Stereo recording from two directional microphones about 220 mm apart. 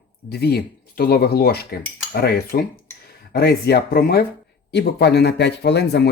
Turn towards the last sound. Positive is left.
turn(degrees=50)  # may be behind; listen again after turning